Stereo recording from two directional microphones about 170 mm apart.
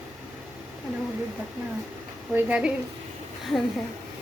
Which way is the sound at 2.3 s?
10° right (ahead or behind).